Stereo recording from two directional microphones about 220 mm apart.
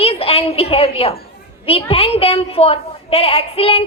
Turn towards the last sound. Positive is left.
turn(degrees=25)  # may be behind; listen again after turning